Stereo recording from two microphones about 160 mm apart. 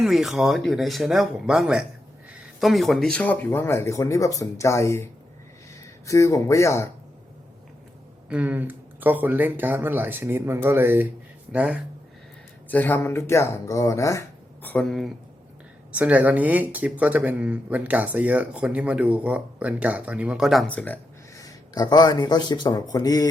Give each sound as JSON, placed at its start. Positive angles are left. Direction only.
{"t": 0.0, "sound": "speech", "side_deg": 0}
{"t": 8.3, "sound": "speech", "side_deg": -10}
{"t": 12.6, "sound": "speech", "side_deg": 10}
{"t": 21.3, "sound": "speech", "side_deg": 25}